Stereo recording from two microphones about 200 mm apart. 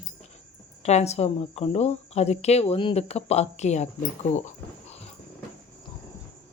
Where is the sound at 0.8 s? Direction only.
35° left (ahead or behind).